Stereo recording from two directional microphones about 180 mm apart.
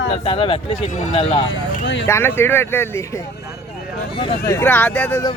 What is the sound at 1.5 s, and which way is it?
Speech, 90° left.